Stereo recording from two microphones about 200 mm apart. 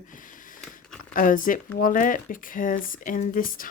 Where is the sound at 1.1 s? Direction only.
40° left (ahead or behind).